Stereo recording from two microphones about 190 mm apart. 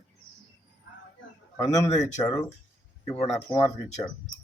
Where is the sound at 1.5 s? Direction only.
15° left (ahead or behind).